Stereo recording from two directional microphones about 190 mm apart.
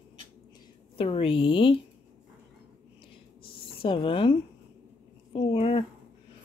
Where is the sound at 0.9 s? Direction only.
30° left (ahead or behind).